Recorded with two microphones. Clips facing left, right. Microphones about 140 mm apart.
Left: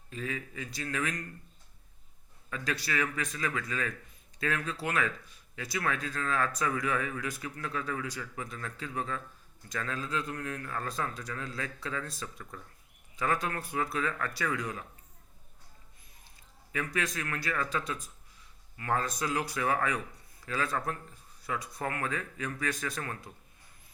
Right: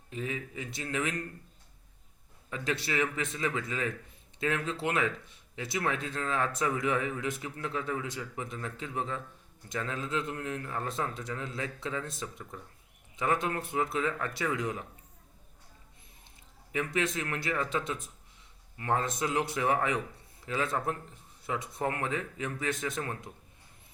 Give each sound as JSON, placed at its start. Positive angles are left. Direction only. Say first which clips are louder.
{"t": 0.1, "sound": "speech", "louder": "right 1 dB", "side_deg": -20}
{"t": 2.5, "sound": "speech", "louder": "right 2 dB", "side_deg": -25}
{"t": 16.7, "sound": "speech", "louder": "right 3 dB", "side_deg": -25}